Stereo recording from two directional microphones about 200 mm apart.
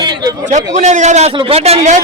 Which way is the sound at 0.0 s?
20° right (ahead or behind).